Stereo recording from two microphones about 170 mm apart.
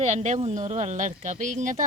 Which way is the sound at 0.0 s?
45° right (ahead or behind).